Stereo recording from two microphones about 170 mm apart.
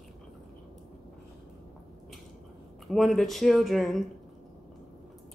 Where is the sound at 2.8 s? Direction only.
Centre (ahead or behind).